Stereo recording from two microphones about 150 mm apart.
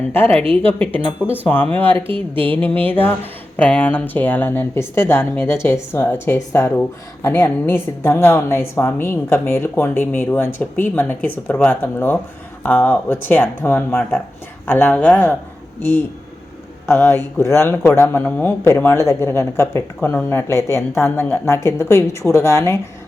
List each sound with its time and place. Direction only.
0.1 s speech: 15° left (ahead or behind)
2.0 s a sound: 35° right (ahead or behind)
2.4 s speech: 10° left (ahead or behind)
16.9 s speech: 15° left (ahead or behind)